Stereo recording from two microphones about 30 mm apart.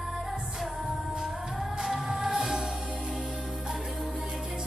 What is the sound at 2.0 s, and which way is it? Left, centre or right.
Music, centre.